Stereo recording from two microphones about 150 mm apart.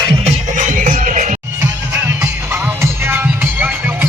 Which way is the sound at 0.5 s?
60° right (ahead or behind).